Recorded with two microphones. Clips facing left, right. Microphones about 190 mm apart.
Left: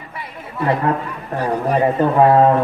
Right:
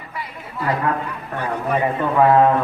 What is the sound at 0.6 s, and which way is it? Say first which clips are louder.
A man's voice: left 3 dB; 25° left (ahead or behind).